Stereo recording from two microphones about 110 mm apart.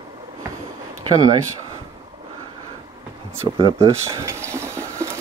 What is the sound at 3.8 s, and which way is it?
Speech, 25° right (ahead or behind).